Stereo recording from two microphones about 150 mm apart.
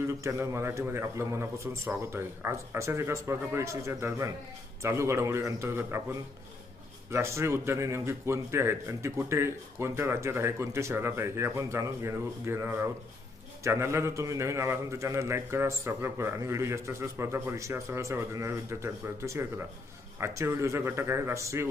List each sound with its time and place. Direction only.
0.2 s a man's voice: 20° right (ahead or behind)